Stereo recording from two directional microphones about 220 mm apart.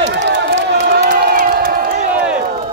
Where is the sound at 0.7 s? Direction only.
45° right (ahead or behind).